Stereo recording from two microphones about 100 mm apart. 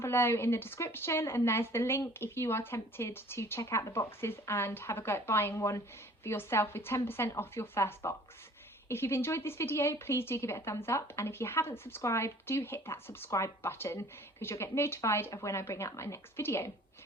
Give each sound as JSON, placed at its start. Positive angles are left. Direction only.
{"t": 0.0, "sound": "a woman's voice", "side_deg": 25}